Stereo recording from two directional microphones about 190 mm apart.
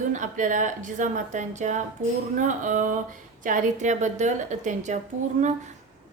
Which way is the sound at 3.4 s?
40° right (ahead or behind).